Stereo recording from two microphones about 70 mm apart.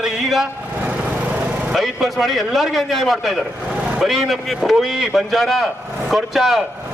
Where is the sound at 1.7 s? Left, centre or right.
Centre.